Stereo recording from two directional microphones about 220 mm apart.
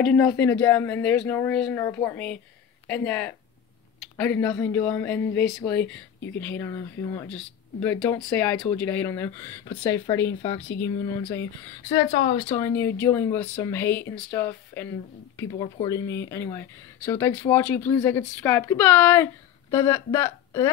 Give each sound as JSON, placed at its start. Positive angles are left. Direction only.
{"t": 0.0, "sound": "speech", "side_deg": 5}
{"t": 11.9, "sound": "speech", "side_deg": 30}
{"t": 12.5, "sound": "speech", "side_deg": 15}
{"t": 15.5, "sound": "speech", "side_deg": 20}